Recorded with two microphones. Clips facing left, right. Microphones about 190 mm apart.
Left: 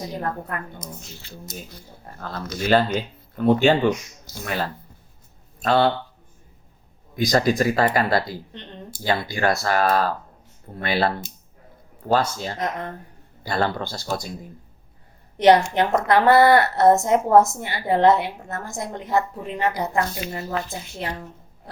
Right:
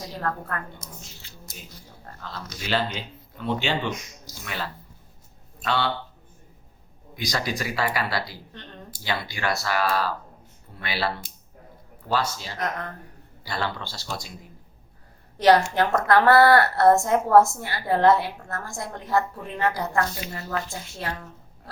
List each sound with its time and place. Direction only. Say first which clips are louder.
0.0 s a woman's voice: left 2 dB; 20° left (ahead or behind)
2.2 s speech: left 9 dB; 50° left (ahead or behind)
7.2 s speech: left 9 dB; 50° left (ahead or behind)
8.5 s a woman's voice: left 4 dB; 20° left (ahead or behind)
9.0 s speech: left 6 dB; 50° left (ahead or behind)
12.5 s a woman's voice: left 1 dB; 25° left (ahead or behind)
13.4 s speech: left 6 dB; 45° left (ahead or behind)
15.4 s a woman's voice: left 3 dB; 20° left (ahead or behind)